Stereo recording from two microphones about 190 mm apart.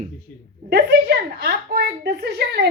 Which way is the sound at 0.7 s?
60° right (ahead or behind).